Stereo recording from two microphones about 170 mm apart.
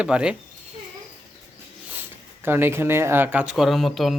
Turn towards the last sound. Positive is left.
turn(degrees=0)  # may be behind; listen again after turning